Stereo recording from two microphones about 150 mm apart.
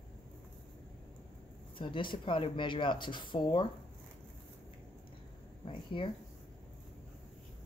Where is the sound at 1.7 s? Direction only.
35° left (ahead or behind).